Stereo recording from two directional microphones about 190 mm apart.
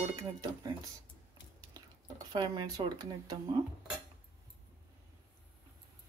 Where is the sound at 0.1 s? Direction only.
20° right (ahead or behind).